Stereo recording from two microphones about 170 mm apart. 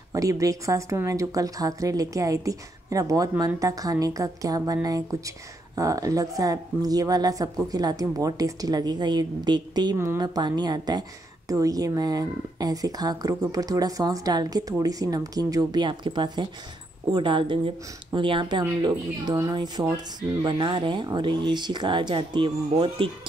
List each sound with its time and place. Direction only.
0.1 s a woman's voice: 20° right (ahead or behind)